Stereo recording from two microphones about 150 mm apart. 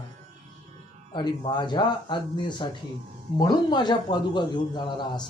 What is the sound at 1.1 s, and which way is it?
A man's voice, 30° left (ahead or behind).